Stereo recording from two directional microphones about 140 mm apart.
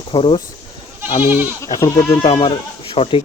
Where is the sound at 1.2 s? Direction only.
15° right (ahead or behind).